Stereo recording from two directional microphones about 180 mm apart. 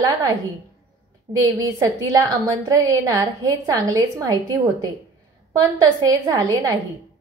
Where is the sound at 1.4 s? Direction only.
20° right (ahead or behind).